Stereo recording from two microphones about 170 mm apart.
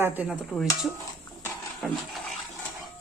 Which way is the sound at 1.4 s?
Centre (ahead or behind).